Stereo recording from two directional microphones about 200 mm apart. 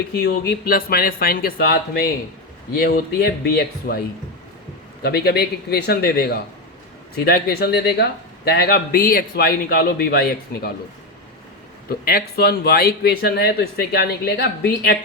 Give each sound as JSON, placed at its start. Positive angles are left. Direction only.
{"t": 0.1, "sound": "speech", "side_deg": 50}
{"t": 5.0, "sound": "speech", "side_deg": 55}
{"t": 11.9, "sound": "speech", "side_deg": 50}